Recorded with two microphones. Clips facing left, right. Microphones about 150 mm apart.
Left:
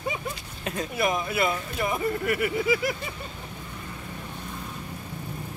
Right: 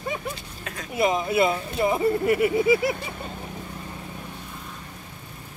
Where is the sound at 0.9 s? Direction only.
20° right (ahead or behind).